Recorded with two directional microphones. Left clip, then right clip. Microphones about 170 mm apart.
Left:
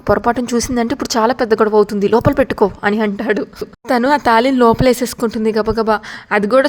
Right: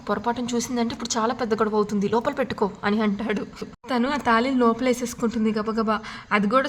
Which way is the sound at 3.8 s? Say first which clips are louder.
Left 10 dB; 45° left (ahead or behind).